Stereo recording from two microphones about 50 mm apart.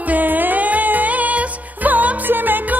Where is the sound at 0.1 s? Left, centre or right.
Right.